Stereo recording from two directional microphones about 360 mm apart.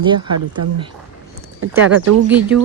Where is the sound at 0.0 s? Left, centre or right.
Centre.